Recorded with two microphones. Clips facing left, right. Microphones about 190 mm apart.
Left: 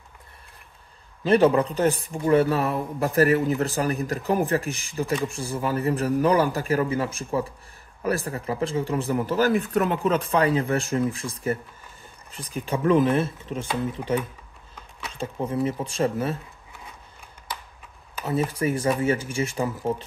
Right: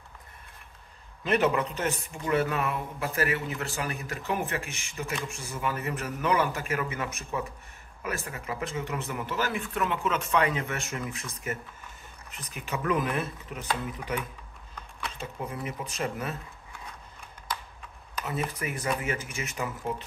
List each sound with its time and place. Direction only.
1.2 s speech: 30° left (ahead or behind)
18.5 s speech: 30° left (ahead or behind)